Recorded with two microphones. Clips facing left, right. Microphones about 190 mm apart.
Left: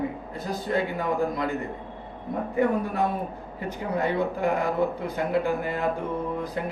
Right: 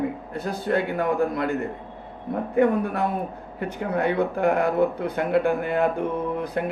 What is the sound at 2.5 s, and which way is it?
A man's voice, 55° right (ahead or behind).